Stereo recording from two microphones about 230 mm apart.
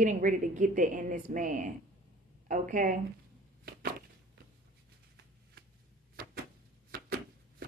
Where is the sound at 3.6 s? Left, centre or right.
Right.